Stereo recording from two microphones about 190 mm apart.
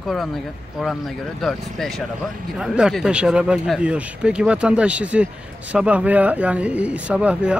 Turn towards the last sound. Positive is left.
turn(degrees=-5)  # may be behind; listen again after turning